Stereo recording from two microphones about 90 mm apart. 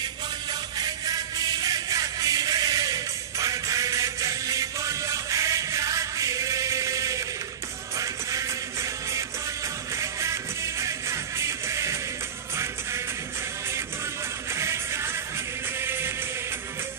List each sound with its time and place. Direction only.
0.7 s music: 45° right (ahead or behind)
9.9 s music: 35° right (ahead or behind)
14.5 s music: 30° right (ahead or behind)